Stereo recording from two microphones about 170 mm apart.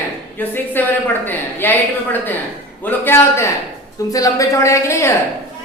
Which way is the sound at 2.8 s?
15° left (ahead or behind).